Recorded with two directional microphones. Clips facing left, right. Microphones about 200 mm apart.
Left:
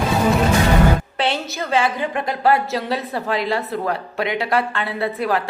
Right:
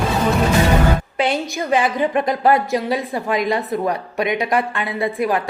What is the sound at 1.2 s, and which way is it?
A woman's voice, 15° right (ahead or behind).